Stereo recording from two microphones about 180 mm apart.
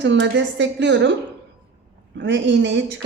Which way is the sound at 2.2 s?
80° right.